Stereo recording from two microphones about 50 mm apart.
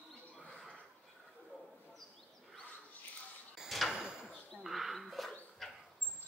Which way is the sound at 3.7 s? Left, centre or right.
Centre.